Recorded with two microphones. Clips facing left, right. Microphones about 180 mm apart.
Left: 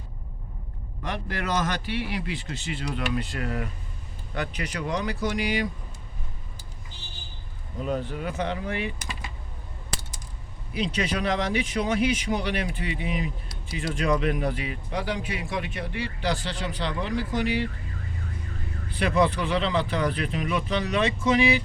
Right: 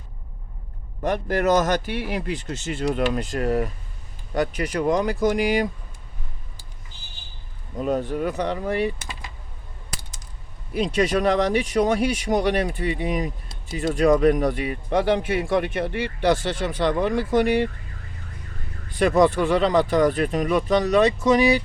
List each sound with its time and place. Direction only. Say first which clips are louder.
1.0 s speech: right 10 dB; 45° right (ahead or behind)
7.8 s speech: right 6 dB; 45° right (ahead or behind)
10.8 s speech: right 6 dB; 45° right (ahead or behind)
18.9 s speech: right 6 dB; 45° right (ahead or behind)